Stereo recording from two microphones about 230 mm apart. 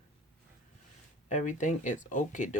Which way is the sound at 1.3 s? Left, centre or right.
Left.